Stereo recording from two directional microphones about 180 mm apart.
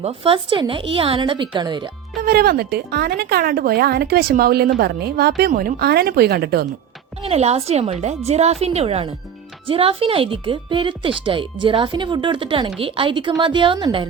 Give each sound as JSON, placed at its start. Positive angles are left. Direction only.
{"t": 0.0, "sound": "speech", "side_deg": -30}
{"t": 2.2, "sound": "speech", "side_deg": -60}
{"t": 7.2, "sound": "a woman's voice", "side_deg": -35}